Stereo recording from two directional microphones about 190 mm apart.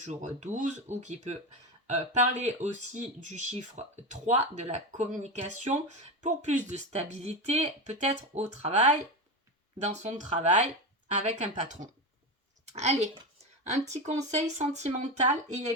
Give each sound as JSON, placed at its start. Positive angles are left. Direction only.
{"t": 0.0, "sound": "a woman's voice", "side_deg": -40}